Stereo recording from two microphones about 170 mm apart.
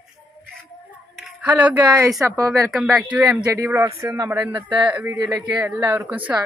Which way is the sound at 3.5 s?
15° right (ahead or behind).